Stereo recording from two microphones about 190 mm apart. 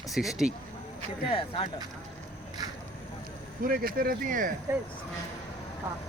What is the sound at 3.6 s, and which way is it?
Speech, 50° right (ahead or behind).